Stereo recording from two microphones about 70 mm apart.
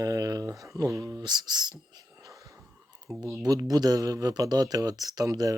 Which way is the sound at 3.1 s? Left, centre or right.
Centre.